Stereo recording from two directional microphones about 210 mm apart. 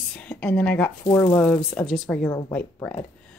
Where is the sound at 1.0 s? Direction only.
20° left (ahead or behind).